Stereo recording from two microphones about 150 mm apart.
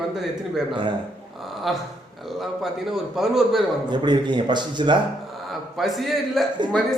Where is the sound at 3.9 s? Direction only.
30° right (ahead or behind).